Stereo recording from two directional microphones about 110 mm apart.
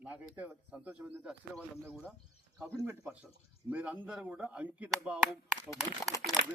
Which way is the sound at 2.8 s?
15° right (ahead or behind).